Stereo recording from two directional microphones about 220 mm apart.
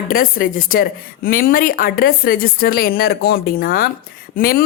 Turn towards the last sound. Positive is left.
turn(degrees=40)  # may be behind; listen again after turning